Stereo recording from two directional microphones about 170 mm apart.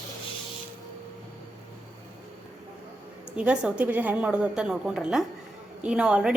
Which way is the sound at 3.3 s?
5° right (ahead or behind).